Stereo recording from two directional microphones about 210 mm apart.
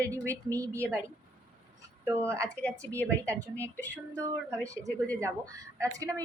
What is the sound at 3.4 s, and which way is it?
A woman's voice, 15° right (ahead or behind).